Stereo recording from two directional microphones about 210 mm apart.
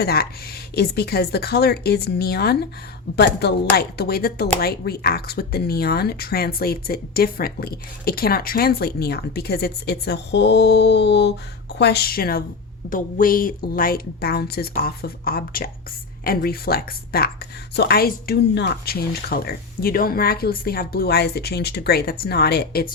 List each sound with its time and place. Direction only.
0.0 s speech: 45° left (ahead or behind)